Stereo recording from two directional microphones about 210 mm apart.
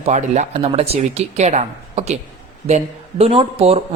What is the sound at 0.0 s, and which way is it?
A man's voice, 35° right (ahead or behind).